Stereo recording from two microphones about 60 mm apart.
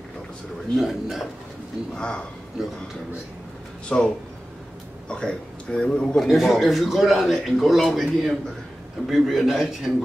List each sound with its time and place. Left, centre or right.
0.7 s a man's voice: centre
2.0 s a man's voice: centre
2.6 s a man's voice: centre
3.9 s a man's voice: centre
6.2 s a man's voice: centre